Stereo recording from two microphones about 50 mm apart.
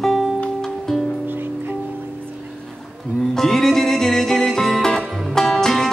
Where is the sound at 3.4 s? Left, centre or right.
Centre.